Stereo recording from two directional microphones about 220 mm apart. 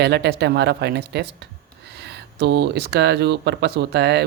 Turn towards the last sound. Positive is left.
turn(degrees=-50)  # may be behind; listen again after turning